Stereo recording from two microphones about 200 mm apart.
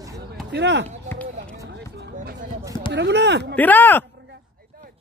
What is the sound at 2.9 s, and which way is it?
Speech, 60° right (ahead or behind).